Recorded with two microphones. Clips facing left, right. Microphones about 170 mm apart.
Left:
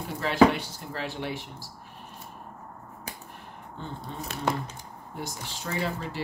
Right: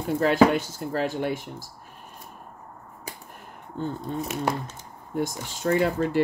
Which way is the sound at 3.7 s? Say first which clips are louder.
Right 9 dB; 45° right (ahead or behind).